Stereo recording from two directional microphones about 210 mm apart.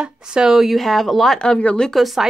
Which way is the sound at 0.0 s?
5° right (ahead or behind).